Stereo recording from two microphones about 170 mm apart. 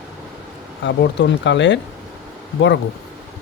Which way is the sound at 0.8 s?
90° left.